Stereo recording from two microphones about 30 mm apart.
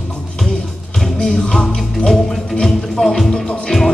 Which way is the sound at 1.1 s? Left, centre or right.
Left.